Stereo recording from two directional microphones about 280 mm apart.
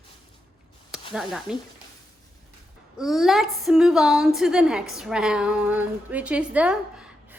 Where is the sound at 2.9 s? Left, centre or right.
Centre.